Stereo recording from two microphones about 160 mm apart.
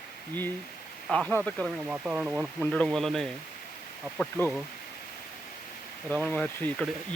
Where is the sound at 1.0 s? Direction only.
5° left (ahead or behind).